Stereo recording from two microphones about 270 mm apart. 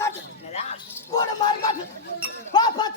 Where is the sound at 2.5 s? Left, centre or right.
Centre.